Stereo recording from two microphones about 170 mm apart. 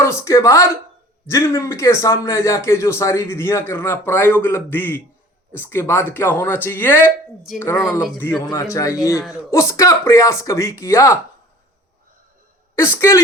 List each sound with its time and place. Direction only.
0.0 s a man's voice: 15° left (ahead or behind)
9.1 s speech: 5° right (ahead or behind)
9.5 s a man's voice: 20° left (ahead or behind)
12.7 s a man's voice: 15° left (ahead or behind)